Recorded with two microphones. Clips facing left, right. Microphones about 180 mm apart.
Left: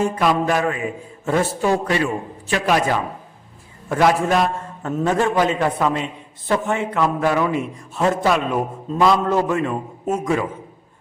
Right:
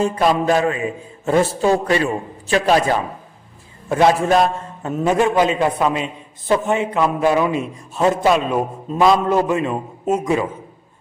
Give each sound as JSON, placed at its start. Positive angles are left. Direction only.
{"t": 0.0, "sound": "a man's voice", "side_deg": -30}